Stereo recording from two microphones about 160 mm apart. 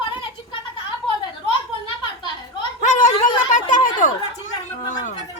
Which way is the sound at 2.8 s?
55° left (ahead or behind).